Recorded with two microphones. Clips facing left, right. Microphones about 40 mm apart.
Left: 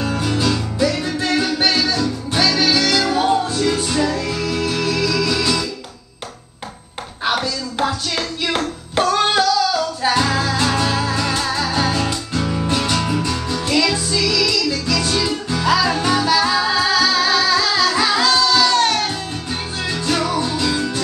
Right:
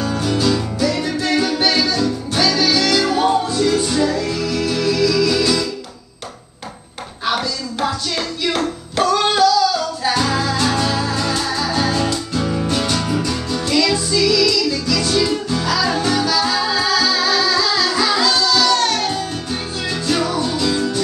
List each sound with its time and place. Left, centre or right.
0.0 s music: centre
3.6 s music: centre
7.3 s music: centre
15.6 s music: left
18.7 s music: left
19.9 s music: centre